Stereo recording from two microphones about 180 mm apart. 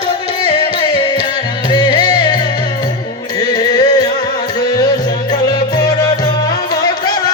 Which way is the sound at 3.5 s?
20° left (ahead or behind).